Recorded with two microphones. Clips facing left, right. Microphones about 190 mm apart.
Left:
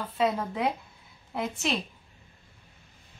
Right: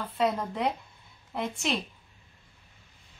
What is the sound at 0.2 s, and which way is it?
Speech, centre (ahead or behind).